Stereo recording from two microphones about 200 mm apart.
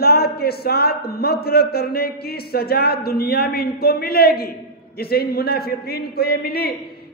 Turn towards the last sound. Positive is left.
turn(degrees=50)  # may be behind; listen again after turning